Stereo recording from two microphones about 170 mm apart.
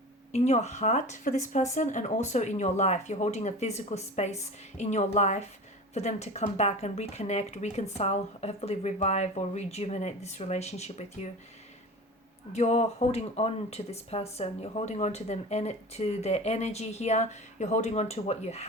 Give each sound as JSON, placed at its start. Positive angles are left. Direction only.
{"t": 0.3, "sound": "speech", "side_deg": 40}
{"t": 12.5, "sound": "speech", "side_deg": 40}